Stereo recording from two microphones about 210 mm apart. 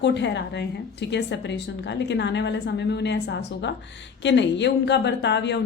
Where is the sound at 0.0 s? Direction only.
55° left (ahead or behind).